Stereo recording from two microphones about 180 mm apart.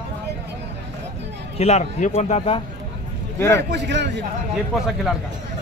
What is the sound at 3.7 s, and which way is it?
Speech, 75° right (ahead or behind).